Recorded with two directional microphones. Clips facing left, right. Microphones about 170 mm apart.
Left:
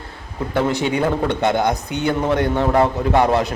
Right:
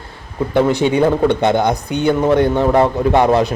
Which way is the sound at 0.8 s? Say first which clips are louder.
Right 6 dB; 20° right (ahead or behind).